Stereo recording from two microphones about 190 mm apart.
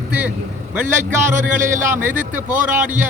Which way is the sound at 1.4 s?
40° right (ahead or behind).